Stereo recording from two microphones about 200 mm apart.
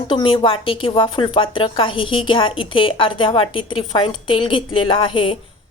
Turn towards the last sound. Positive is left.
turn(degrees=25)  # may be behind; listen again after turning